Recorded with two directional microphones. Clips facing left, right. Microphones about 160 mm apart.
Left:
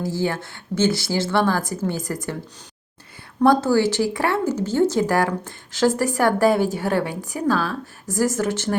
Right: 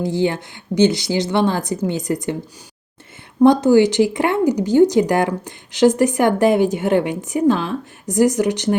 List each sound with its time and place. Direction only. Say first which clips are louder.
0.0 s speech: right 5 dB; 20° right (ahead or behind)
3.4 s speech: right 5 dB; 20° right (ahead or behind)